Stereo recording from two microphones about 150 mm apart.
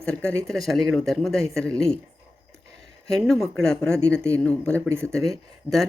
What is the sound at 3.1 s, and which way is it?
Speech, centre (ahead or behind).